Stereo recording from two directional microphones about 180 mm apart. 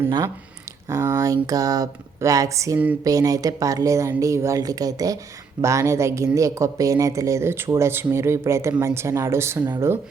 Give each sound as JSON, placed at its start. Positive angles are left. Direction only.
{"t": 0.9, "sound": "speech", "side_deg": -15}